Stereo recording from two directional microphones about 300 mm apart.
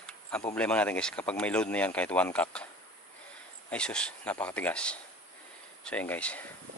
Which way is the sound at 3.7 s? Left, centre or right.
Centre.